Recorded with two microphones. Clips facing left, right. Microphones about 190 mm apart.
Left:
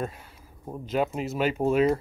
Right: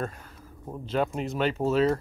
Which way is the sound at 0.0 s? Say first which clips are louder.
Left 1 dB; 10° left (ahead or behind).